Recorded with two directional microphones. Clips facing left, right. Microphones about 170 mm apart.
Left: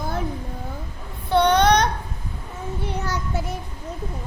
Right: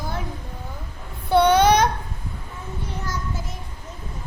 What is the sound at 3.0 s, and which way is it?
Child singing, 70° left (ahead or behind).